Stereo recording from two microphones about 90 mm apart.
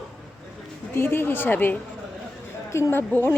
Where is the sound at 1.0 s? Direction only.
25° left (ahead or behind).